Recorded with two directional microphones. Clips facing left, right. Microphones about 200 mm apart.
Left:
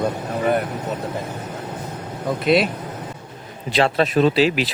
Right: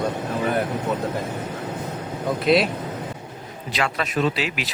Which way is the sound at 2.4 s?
Centre (ahead or behind).